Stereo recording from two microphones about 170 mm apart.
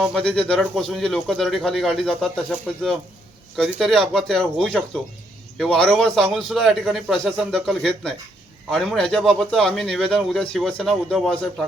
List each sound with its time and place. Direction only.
0.0 s a man's voice: 5° left (ahead or behind)
3.6 s a man's voice: centre (ahead or behind)